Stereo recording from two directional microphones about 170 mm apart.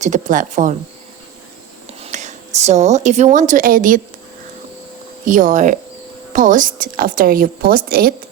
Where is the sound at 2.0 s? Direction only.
45° right (ahead or behind).